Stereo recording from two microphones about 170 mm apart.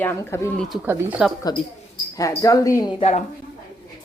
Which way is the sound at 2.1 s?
20° left (ahead or behind).